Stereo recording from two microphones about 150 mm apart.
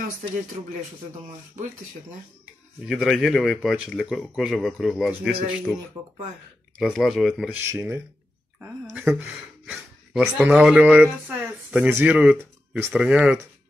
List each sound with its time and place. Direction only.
2.8 s speech: 5° right (ahead or behind)
6.8 s speech: 5° right (ahead or behind)
7.7 s speech: 20° right (ahead or behind)
8.8 s speech: 5° right (ahead or behind)